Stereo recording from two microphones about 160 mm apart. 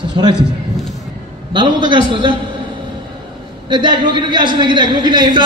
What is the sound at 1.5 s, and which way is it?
Speech, 30° right (ahead or behind).